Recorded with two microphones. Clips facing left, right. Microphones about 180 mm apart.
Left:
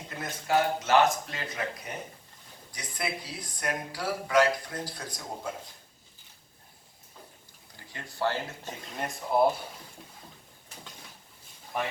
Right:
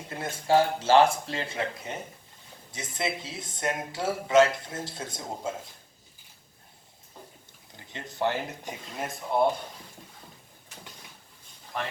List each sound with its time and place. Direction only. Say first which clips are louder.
0.1 s speech: right 4 dB; 30° right (ahead or behind)
7.9 s speech: right 2 dB; 20° right (ahead or behind)
9.0 s speech: left 1 dB; centre (ahead or behind)
11.7 s speech: left 2 dB; 10° left (ahead or behind)